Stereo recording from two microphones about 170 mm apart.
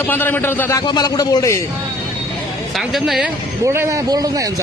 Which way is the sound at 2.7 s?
Centre (ahead or behind).